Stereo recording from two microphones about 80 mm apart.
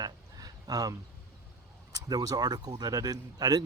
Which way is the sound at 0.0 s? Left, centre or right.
Right.